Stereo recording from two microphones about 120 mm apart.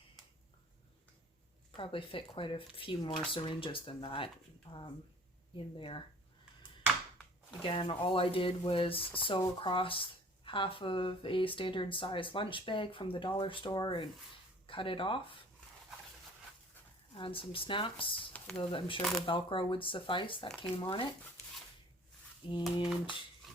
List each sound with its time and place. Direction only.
1.7 s speech: 45° left (ahead or behind)
7.6 s speech: 45° left (ahead or behind)
17.2 s speech: 45° left (ahead or behind)
22.6 s a sound: centre (ahead or behind)